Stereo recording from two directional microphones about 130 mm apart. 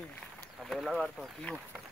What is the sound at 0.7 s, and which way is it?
Speech, centre (ahead or behind).